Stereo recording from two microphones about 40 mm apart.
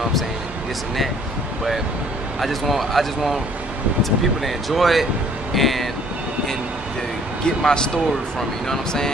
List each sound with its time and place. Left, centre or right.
2.4 s speech: centre
7.4 s speech: centre